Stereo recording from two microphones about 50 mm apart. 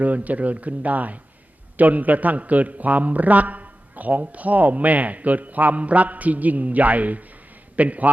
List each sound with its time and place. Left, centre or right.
0.0 s a man's voice: right